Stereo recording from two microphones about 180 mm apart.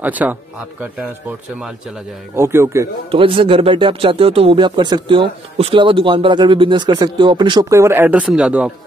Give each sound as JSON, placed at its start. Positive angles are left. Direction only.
{"t": 0.0, "sound": "speech", "side_deg": -10}
{"t": 2.3, "sound": "speech", "side_deg": -15}
{"t": 3.1, "sound": "speech", "side_deg": -30}